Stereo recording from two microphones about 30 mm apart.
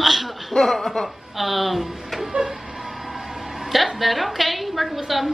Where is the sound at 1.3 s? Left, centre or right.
Centre.